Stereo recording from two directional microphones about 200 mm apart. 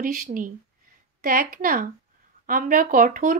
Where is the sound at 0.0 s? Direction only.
40° right (ahead or behind).